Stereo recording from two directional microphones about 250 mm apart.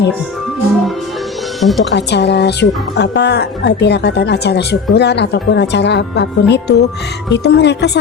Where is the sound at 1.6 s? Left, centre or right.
Centre.